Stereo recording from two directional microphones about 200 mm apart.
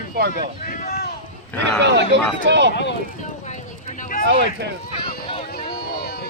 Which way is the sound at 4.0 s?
40° left (ahead or behind).